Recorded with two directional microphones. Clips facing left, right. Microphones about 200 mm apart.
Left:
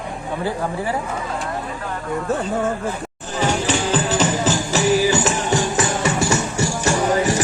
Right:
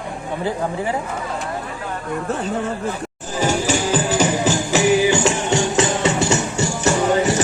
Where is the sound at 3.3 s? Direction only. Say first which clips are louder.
Right 1 dB; 10° right (ahead or behind).